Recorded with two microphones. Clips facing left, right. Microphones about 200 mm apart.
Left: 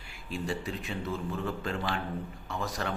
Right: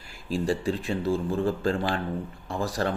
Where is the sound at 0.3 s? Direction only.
35° right (ahead or behind).